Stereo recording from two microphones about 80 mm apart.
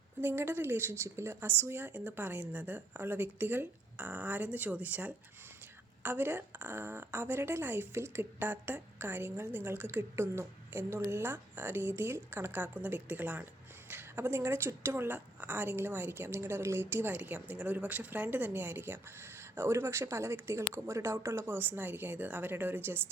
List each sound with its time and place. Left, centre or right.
0.2 s a woman's voice: right